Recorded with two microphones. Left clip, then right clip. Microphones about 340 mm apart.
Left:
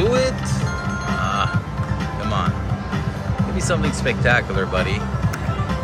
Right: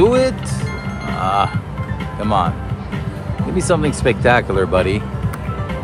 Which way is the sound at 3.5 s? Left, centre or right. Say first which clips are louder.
Right 6 dB; centre.